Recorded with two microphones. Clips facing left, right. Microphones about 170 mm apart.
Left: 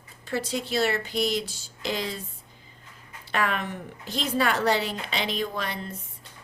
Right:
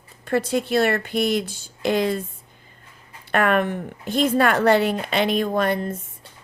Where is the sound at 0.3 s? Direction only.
55° right (ahead or behind).